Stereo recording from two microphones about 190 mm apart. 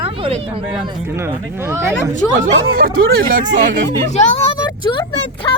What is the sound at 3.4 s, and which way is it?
Speech, 75° right (ahead or behind).